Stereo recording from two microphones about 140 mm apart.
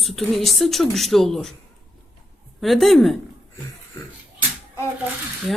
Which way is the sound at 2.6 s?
Centre (ahead or behind).